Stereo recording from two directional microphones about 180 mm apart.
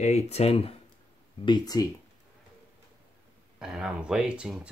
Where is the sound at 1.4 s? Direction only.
20° left (ahead or behind).